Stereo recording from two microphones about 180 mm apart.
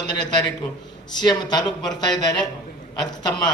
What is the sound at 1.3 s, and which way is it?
A man's voice, 25° left (ahead or behind).